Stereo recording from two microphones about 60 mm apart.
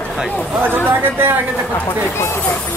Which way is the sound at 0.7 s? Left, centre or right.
Right.